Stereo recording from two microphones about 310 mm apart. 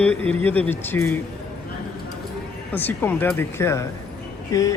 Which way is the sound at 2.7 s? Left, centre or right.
Centre.